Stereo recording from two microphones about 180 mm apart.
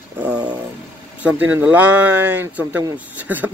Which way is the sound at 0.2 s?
5° right (ahead or behind).